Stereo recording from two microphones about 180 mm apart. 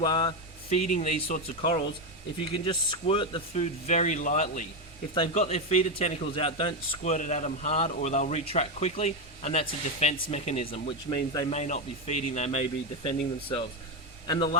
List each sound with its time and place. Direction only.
0.0 s a man's voice: 25° left (ahead or behind)